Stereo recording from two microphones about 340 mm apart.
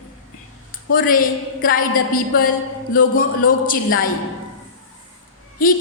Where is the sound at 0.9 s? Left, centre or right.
Left.